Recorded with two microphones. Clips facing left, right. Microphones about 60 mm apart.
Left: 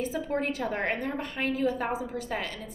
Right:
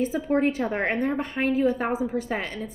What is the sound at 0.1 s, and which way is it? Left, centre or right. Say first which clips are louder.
A woman's voice: right 6 dB; right.